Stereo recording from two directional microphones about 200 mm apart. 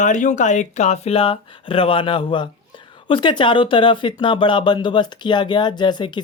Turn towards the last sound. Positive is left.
turn(degrees=20)  # may be behind; listen again after turning